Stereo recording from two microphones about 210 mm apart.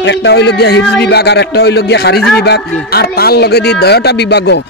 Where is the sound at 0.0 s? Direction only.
55° left (ahead or behind).